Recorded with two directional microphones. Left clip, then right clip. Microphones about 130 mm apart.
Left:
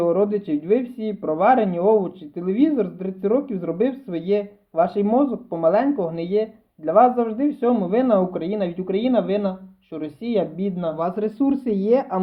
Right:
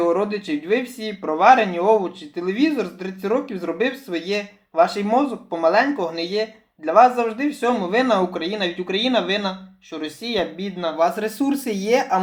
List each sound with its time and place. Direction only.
0.0 s speech: 40° left (ahead or behind)